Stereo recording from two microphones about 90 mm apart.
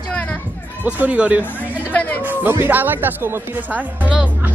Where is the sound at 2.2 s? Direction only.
20° right (ahead or behind).